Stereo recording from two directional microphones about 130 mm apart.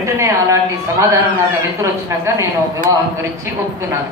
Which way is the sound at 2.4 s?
25° right (ahead or behind).